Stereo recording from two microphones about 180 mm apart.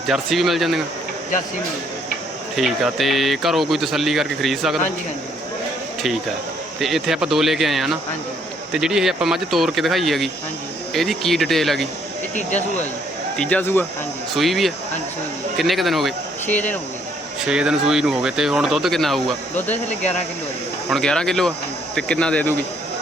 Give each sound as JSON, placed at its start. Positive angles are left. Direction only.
{"t": 0.1, "sound": "speech", "side_deg": 0}
{"t": 2.6, "sound": "speech", "side_deg": 0}
{"t": 6.7, "sound": "speech", "side_deg": 0}
{"t": 12.4, "sound": "speech", "side_deg": 40}
{"t": 13.3, "sound": "speech", "side_deg": 5}
{"t": 14.3, "sound": "speech", "side_deg": 0}
{"t": 17.4, "sound": "speech", "side_deg": -5}
{"t": 20.9, "sound": "speech", "side_deg": 5}